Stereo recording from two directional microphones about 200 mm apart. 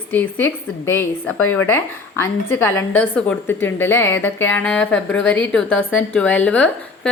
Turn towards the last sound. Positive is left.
turn(degrees=5)  # may be behind; listen again after turning